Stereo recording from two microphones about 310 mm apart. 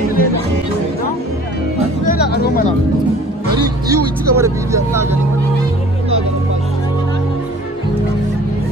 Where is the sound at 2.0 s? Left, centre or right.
Left.